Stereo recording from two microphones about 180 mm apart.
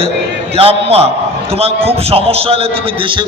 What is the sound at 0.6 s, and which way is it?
A man's voice, 35° right (ahead or behind).